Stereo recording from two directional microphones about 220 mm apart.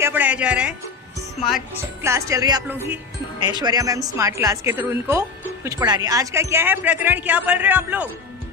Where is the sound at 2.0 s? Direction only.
15° right (ahead or behind).